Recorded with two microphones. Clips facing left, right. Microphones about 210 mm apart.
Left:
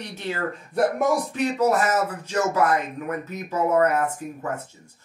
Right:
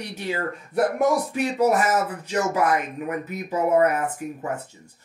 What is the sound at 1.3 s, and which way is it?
Speech, 15° right (ahead or behind).